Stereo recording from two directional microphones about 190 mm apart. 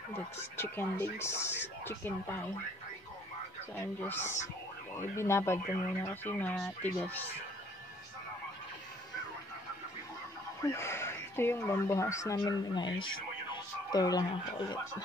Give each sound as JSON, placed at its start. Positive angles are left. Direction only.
{"t": 0.1, "sound": "speech", "side_deg": 10}
{"t": 3.7, "sound": "speech", "side_deg": 10}
{"t": 10.6, "sound": "speech", "side_deg": 15}
{"t": 13.9, "sound": "speech", "side_deg": 20}